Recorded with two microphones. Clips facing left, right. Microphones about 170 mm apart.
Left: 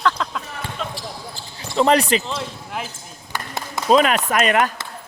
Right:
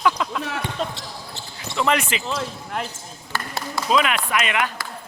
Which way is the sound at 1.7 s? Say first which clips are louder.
Left 6 dB; 35° left (ahead or behind).